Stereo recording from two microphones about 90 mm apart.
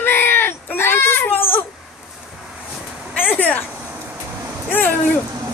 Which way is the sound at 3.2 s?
20° left (ahead or behind).